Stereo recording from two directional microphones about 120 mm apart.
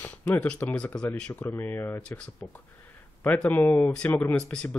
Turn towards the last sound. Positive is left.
turn(degrees=10)  # may be behind; listen again after turning